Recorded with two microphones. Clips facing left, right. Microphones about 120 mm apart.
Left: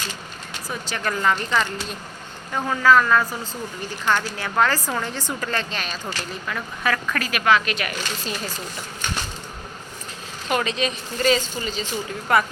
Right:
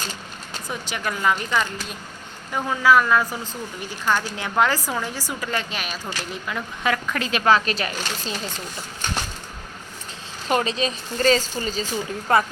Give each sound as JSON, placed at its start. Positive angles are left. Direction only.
{"t": 0.7, "sound": "speech", "side_deg": -15}
{"t": 10.5, "sound": "speech", "side_deg": -35}